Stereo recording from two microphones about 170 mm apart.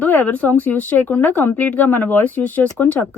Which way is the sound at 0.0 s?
10° left (ahead or behind).